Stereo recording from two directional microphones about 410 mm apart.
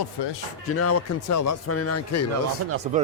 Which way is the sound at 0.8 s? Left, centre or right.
Left.